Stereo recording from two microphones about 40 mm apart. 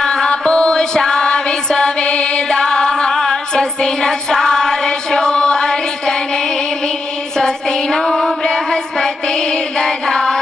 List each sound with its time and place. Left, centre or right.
0.0 s chant: centre
7.3 s music: centre